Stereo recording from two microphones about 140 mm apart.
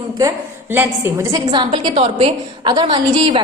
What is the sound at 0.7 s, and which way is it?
Speech, 20° right (ahead or behind).